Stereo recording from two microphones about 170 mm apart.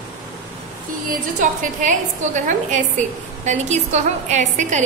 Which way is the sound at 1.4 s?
50° right (ahead or behind).